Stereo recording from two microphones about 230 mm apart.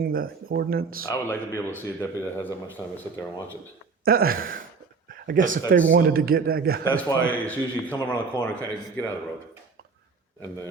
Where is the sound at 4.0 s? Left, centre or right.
Right.